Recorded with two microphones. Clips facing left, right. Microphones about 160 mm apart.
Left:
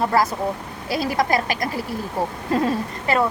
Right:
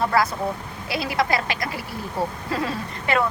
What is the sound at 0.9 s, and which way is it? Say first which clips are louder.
Speech: left 3 dB; 40° left (ahead or behind).